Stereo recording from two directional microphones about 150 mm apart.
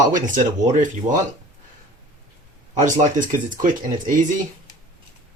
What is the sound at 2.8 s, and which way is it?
Speech, 60° right (ahead or behind).